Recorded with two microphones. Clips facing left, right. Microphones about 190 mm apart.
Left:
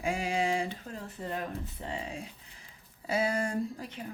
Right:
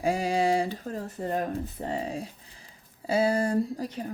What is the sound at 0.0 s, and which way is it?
A woman's voice, 35° right (ahead or behind).